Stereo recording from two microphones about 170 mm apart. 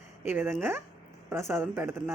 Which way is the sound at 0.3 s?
10° right (ahead or behind).